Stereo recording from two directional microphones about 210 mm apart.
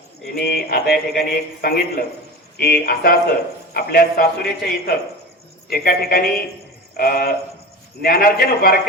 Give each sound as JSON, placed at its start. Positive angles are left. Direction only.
{"t": 0.3, "sound": "speech", "side_deg": 50}